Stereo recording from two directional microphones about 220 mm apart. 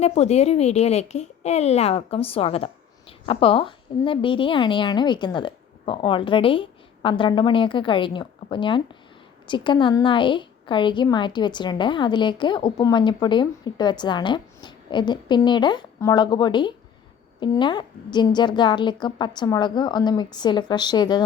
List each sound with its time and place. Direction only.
0.0 s a woman's voice: 30° left (ahead or behind)